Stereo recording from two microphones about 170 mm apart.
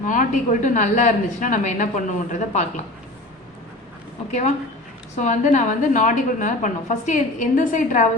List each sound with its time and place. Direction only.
0.0 s a woman's voice: 50° left (ahead or behind)
4.3 s a woman's voice: 45° left (ahead or behind)